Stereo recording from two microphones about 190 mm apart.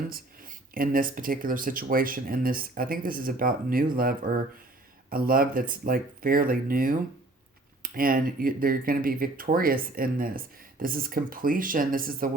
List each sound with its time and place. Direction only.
0.7 s speech: 50° right (ahead or behind)